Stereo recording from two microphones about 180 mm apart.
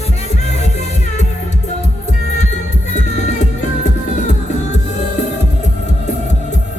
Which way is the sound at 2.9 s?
40° left (ahead or behind).